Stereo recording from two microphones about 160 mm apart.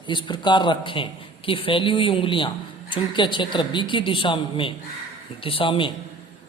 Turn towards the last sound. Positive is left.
turn(degrees=30)  # may be behind; listen again after turning